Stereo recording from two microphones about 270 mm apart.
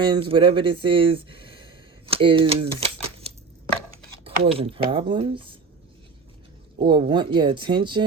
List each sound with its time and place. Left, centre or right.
0.1 s speech: centre
6.8 s speech: centre